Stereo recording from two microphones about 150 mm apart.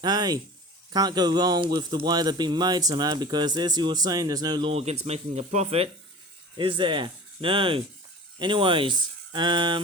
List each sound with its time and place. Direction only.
0.0 s speech: 25° right (ahead or behind)
4.7 s speech: 45° right (ahead or behind)
6.6 s speech: 35° right (ahead or behind)